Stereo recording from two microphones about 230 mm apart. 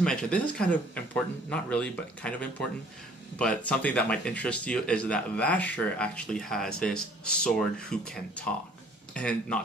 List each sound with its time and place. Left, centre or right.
0.0 s speech: centre